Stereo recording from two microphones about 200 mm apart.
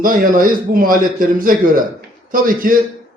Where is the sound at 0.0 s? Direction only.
45° right (ahead or behind).